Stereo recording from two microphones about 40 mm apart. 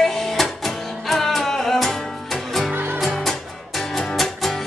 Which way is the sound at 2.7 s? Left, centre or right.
Right.